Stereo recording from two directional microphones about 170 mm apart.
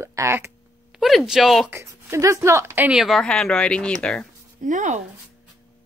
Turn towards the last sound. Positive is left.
turn(degrees=-45)  # may be behind; listen again after turning